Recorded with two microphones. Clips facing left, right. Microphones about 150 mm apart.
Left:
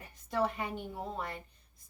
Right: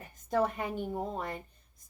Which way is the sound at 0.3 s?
45° right (ahead or behind).